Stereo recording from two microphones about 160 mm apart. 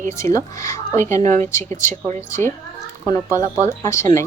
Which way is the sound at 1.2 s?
50° right (ahead or behind).